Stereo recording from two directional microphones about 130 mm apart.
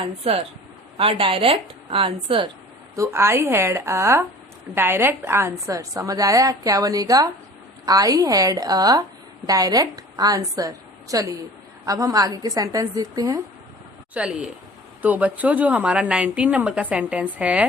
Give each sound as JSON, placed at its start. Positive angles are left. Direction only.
{"t": 0.2, "sound": "a woman's voice", "side_deg": -50}
{"t": 2.9, "sound": "a woman's voice", "side_deg": -20}
{"t": 14.1, "sound": "a woman's voice", "side_deg": -5}